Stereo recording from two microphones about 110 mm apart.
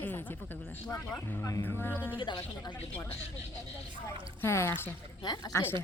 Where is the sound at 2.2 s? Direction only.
45° left (ahead or behind).